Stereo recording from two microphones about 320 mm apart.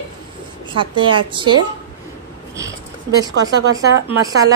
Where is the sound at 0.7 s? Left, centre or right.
Right.